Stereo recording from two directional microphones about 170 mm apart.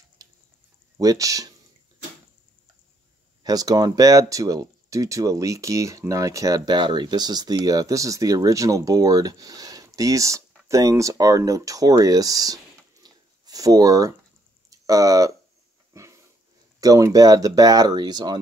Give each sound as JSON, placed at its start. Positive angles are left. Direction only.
{"t": 0.2, "sound": "a sound", "side_deg": -20}
{"t": 0.9, "sound": "speech", "side_deg": -20}
{"t": 3.4, "sound": "speech", "side_deg": -20}
{"t": 13.0, "sound": "a sound", "side_deg": -20}
{"t": 14.7, "sound": "speech", "side_deg": -20}
{"t": 15.9, "sound": "dog", "side_deg": -15}
{"t": 16.8, "sound": "speech", "side_deg": -20}